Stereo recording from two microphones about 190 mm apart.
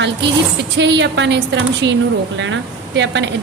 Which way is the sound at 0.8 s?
70° right (ahead or behind).